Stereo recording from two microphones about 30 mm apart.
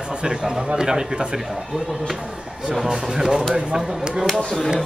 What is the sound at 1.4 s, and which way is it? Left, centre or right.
A man's voice, centre.